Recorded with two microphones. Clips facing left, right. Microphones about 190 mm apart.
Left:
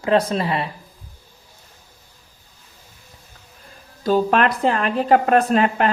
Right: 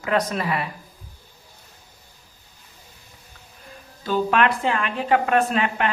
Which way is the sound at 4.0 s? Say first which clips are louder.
Left 3 dB; 40° left (ahead or behind).